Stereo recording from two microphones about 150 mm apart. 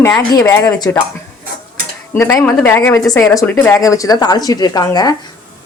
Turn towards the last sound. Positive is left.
turn(degrees=25)  # may be behind; listen again after turning